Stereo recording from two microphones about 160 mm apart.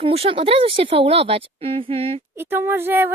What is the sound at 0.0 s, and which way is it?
Speech, 35° right (ahead or behind).